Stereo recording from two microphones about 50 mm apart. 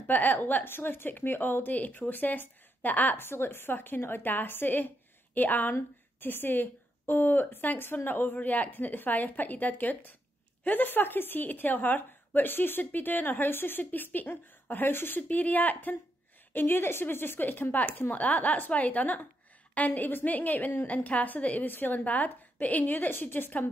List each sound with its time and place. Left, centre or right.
0.0 s a woman's voice: left
3.2 s a woman's voice: left
15.2 s a woman's voice: left
18.1 s a woman's voice: left